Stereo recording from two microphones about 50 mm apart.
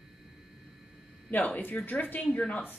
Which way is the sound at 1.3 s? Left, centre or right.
Left.